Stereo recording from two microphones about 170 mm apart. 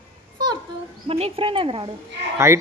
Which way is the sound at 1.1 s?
35° right (ahead or behind).